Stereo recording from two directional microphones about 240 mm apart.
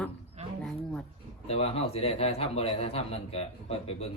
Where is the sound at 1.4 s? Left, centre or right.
Left.